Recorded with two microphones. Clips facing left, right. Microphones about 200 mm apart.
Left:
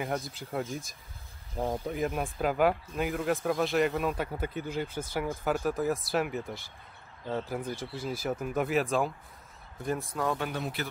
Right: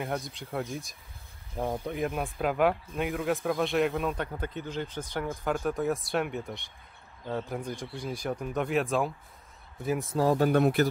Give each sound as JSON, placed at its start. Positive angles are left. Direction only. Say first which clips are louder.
{"t": 0.0, "sound": "speech", "louder": "even", "side_deg": 0}
{"t": 10.1, "sound": "speech", "louder": "right 10 dB", "side_deg": -35}
{"t": 10.5, "sound": "speech", "louder": "right 12 dB", "side_deg": -55}